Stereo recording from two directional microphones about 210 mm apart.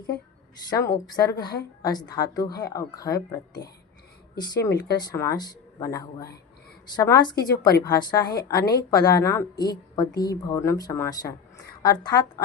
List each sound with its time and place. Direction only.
0.7 s a woman's voice: 15° left (ahead or behind)